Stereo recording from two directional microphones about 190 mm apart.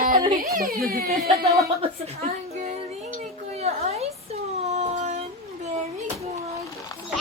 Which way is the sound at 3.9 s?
35° right (ahead or behind).